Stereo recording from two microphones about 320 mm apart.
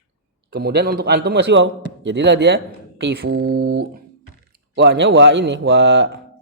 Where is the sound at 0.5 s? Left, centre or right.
Right.